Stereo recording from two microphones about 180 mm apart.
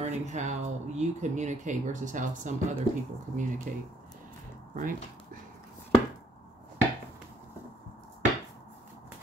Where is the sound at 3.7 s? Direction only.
50° right (ahead or behind).